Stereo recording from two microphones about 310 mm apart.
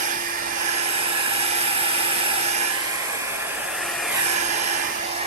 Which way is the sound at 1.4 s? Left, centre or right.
Centre.